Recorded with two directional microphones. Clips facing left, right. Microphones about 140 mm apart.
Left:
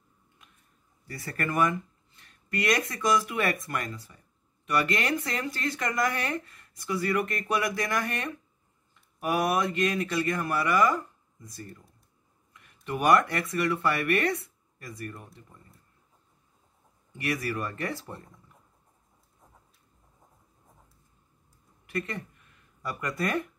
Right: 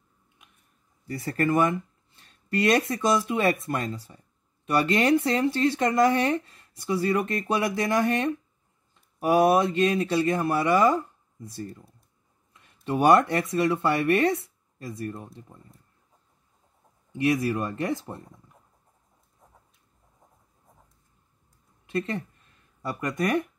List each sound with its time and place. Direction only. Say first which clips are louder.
1.0 s speech: right 7 dB; 25° right (ahead or behind)
17.2 s speech: right 7 dB; 20° right (ahead or behind)
21.8 s speech: right 5 dB; 25° right (ahead or behind)